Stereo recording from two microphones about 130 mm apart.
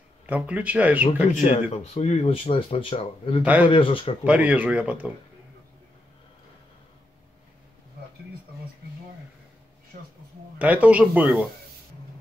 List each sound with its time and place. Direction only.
0.3 s speech: 10° right (ahead or behind)
1.3 s speech: 60° left (ahead or behind); by 4.2 s 45° left (ahead or behind)
4.2 s speech: 10° right (ahead or behind)
10.6 s speech: 10° right (ahead or behind)